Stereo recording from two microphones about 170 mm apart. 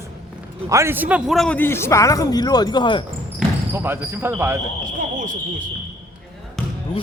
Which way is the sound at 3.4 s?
5° right (ahead or behind).